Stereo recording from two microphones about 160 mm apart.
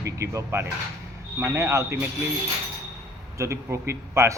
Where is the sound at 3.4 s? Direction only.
15° right (ahead or behind).